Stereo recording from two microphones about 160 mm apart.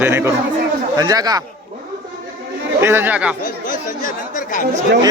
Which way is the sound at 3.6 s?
55° left (ahead or behind).